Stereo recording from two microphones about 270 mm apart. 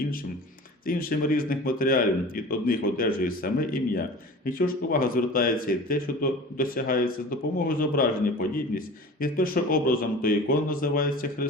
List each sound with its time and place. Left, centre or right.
0.9 s speech: left